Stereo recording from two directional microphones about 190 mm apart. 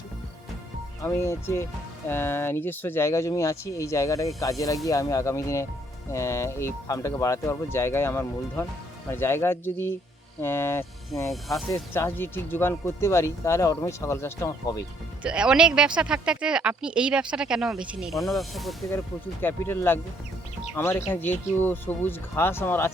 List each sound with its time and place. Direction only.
1.0 s speech: 15° left (ahead or behind)
11.3 s speech: centre (ahead or behind)
11.7 s speech: 15° left (ahead or behind)
15.2 s speech: 5° right (ahead or behind)
18.9 s speech: 10° left (ahead or behind)